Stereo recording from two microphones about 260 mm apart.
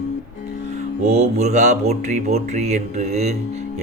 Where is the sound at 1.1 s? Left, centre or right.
Right.